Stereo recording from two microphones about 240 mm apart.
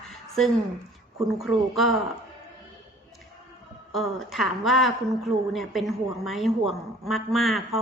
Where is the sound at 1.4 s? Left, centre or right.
Centre.